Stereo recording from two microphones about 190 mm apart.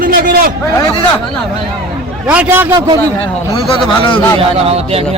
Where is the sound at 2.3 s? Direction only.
10° right (ahead or behind).